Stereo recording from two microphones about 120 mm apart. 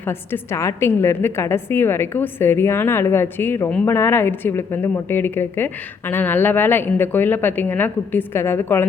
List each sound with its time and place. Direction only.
0.0 s a woman's voice: 20° left (ahead or behind)